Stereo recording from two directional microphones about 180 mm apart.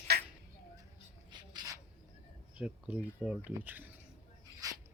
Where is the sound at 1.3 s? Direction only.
25° right (ahead or behind).